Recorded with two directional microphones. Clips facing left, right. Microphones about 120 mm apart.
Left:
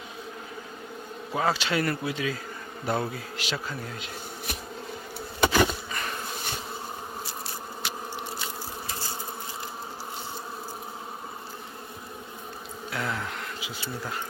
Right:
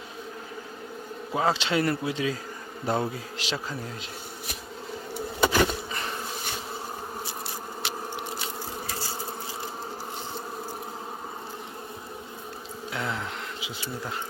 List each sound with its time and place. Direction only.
1.3 s speech: 25° right (ahead or behind)
5.4 s bee: 5° left (ahead or behind)
5.9 s bee: 25° right (ahead or behind)
12.9 s bee: 20° right (ahead or behind)